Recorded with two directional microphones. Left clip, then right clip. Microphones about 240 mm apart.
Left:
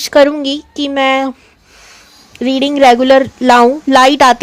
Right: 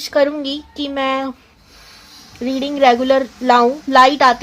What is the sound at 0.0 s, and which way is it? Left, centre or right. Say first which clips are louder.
Speech: left 7 dB; left.